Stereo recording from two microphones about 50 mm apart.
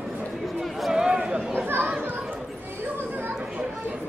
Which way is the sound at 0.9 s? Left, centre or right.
Centre.